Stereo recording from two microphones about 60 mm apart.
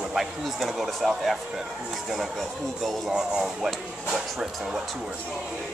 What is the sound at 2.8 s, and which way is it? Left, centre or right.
Speech, centre.